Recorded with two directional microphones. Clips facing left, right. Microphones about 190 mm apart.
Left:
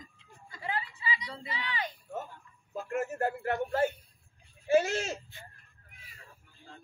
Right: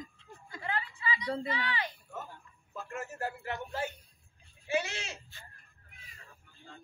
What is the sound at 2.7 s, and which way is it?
A man's voice, 50° left (ahead or behind).